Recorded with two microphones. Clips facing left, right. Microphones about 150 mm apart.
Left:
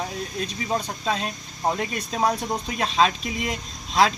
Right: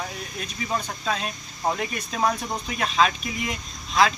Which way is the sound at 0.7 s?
30° left (ahead or behind).